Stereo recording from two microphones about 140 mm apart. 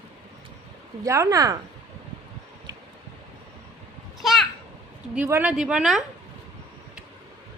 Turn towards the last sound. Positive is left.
turn(degrees=-5)  # may be behind; listen again after turning